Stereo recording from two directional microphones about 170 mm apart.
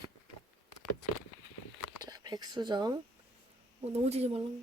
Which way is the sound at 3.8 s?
40° right (ahead or behind).